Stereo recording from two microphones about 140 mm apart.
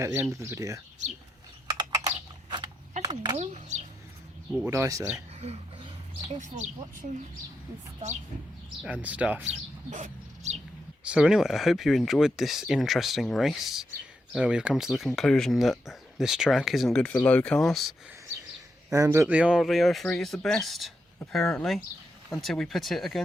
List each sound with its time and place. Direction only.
0.0 s speech: 20° right (ahead or behind)
3.0 s a sound: 30° right (ahead or behind)
3.3 s speech: 55° right (ahead or behind)
4.5 s speech: 15° right (ahead or behind)
8.8 s speech: 10° right (ahead or behind)
9.9 s a sound: 55° right (ahead or behind)
11.1 s speech: 5° right (ahead or behind)
18.9 s speech: 20° right (ahead or behind)
19.4 s speech: 5° right (ahead or behind)